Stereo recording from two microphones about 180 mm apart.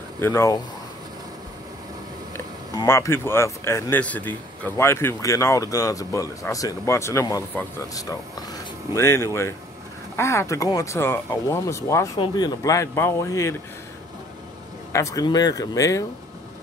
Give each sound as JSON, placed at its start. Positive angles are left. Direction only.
{"t": 0.2, "sound": "speech", "side_deg": 15}
{"t": 2.3, "sound": "speech", "side_deg": 20}
{"t": 14.9, "sound": "speech", "side_deg": 15}